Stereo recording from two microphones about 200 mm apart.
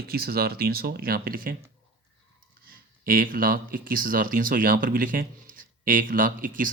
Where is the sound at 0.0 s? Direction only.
50° right (ahead or behind).